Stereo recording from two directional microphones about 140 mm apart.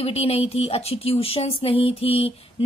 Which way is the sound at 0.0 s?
45° left (ahead or behind).